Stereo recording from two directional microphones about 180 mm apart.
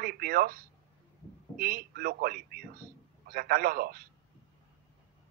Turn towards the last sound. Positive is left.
turn(degrees=-55)  # may be behind; listen again after turning